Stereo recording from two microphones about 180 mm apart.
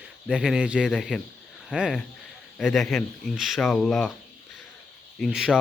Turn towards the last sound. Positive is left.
turn(degrees=-5)  # may be behind; listen again after turning